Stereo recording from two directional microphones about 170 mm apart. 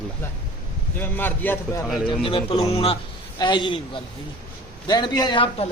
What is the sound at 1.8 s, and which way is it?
Speech, centre (ahead or behind).